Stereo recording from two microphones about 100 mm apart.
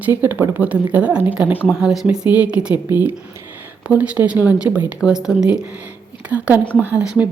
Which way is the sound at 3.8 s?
10° right (ahead or behind).